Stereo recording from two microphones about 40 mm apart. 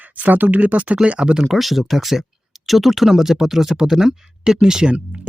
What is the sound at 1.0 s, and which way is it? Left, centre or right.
Speech, right.